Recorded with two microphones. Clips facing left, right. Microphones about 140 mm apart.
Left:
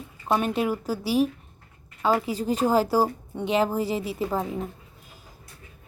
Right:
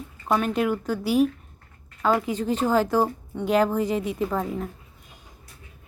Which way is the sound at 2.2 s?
35° left (ahead or behind).